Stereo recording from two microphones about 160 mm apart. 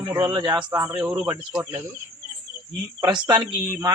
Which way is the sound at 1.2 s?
10° right (ahead or behind).